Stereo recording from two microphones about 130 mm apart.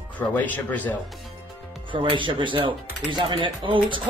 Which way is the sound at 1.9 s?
40° right (ahead or behind).